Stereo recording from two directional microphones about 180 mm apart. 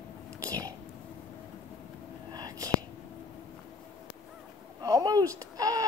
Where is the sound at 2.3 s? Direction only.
20° right (ahead or behind).